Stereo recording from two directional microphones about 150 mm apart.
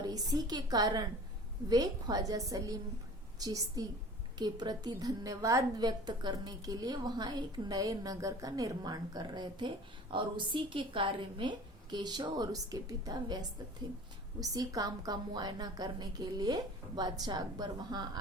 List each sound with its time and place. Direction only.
0.0 s a woman's voice: 25° right (ahead or behind)
14.4 s a woman's voice: 25° right (ahead or behind)